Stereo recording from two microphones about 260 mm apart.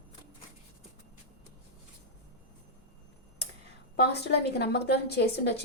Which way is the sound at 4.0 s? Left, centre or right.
Left.